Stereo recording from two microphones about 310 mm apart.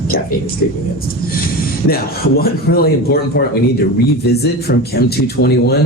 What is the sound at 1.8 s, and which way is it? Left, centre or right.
Speech, left.